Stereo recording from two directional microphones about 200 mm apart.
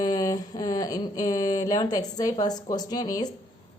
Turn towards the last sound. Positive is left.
turn(degrees=20)  # may be behind; listen again after turning